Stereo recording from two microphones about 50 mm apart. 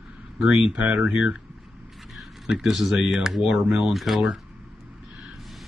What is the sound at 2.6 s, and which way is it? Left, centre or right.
Speech, centre.